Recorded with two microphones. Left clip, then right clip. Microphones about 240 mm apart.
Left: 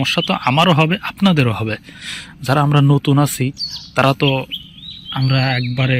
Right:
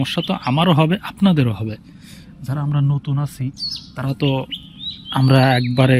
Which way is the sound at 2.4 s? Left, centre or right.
Left.